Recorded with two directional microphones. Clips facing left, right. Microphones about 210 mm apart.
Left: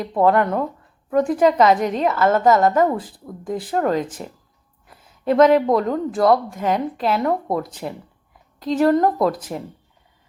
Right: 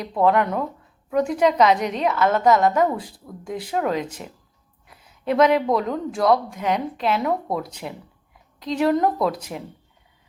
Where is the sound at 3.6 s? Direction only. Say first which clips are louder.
Left 3 dB; centre (ahead or behind).